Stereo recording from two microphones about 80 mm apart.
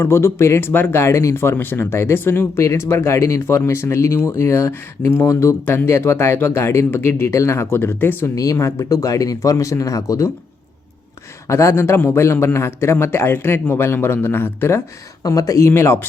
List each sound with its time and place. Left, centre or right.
0.0 s a man's voice: left
8.4 s speech: left
11.4 s a man's voice: left
15.3 s a man's voice: left